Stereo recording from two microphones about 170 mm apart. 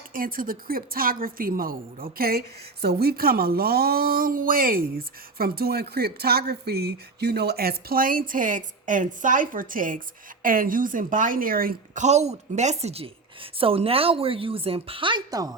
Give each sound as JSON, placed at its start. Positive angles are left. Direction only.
{"t": 0.1, "sound": "a woman's voice", "side_deg": -55}
{"t": 12.0, "sound": "a woman's voice", "side_deg": -40}